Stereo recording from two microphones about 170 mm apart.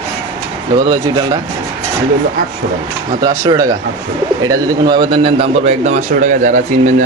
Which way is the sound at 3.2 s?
20° right (ahead or behind).